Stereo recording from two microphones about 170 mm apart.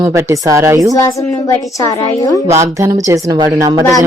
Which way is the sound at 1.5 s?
25° left (ahead or behind).